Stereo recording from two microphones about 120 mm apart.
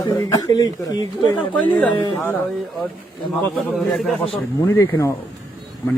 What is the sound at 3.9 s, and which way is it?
Speech, centre (ahead or behind).